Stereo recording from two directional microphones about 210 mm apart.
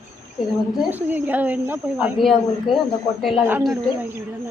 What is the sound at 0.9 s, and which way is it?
A man's voice, 10° right (ahead or behind).